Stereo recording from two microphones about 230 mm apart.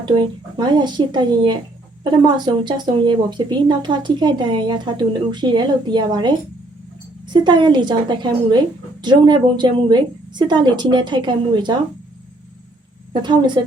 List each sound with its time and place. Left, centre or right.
0.5 s speech: centre
13.2 s speech: centre